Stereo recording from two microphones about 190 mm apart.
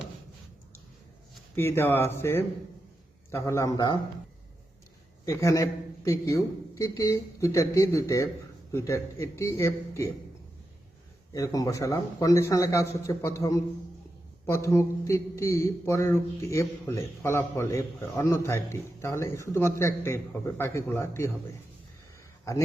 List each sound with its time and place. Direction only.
1.5 s speech: 10° left (ahead or behind)
5.2 s a man's voice: 15° left (ahead or behind)
11.3 s speech: 20° left (ahead or behind)